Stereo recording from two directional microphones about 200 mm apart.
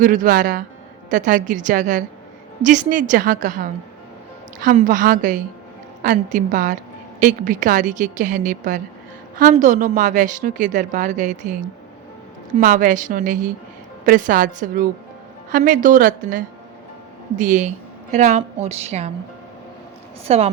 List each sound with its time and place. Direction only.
0.0 s a woman's voice: 45° right (ahead or behind)
20.2 s a woman's voice: 30° right (ahead or behind)